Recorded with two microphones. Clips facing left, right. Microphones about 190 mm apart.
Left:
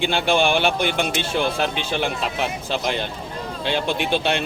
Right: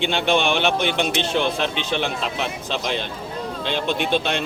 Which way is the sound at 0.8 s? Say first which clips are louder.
Even; 50° left (ahead or behind).